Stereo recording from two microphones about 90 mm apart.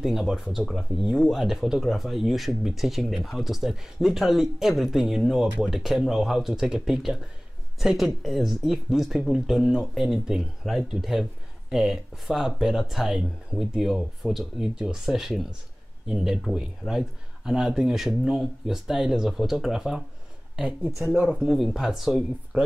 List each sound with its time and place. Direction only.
0.0 s speech: 5° right (ahead or behind)